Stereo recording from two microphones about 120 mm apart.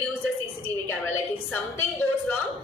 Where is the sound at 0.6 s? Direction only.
20° left (ahead or behind).